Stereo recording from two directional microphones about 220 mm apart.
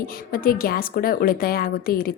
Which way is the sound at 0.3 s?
40° left (ahead or behind).